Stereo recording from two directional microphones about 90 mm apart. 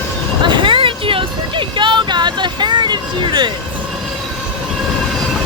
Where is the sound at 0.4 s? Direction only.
65° right (ahead or behind).